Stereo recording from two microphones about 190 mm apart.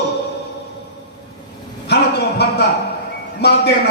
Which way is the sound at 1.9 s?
60° left (ahead or behind).